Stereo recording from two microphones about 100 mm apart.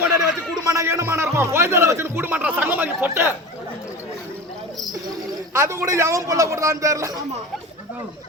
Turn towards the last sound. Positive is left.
turn(degrees=-35)  # may be behind; listen again after turning